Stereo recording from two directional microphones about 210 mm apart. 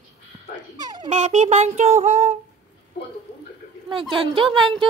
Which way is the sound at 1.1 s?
35° right (ahead or behind).